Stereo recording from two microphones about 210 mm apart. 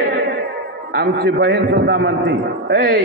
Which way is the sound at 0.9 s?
50° right (ahead or behind).